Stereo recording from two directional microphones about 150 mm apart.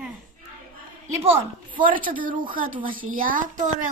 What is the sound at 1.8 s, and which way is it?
A child's voice, 65° right (ahead or behind).